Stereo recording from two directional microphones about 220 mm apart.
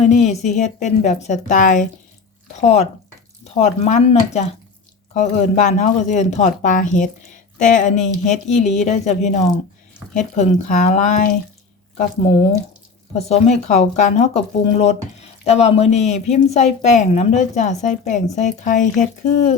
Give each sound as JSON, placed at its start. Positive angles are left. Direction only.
{"t": 0.0, "sound": "a woman's voice", "side_deg": 30}
{"t": 13.1, "sound": "a woman's voice", "side_deg": 30}